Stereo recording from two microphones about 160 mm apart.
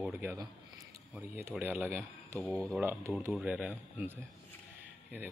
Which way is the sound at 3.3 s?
5° right (ahead or behind).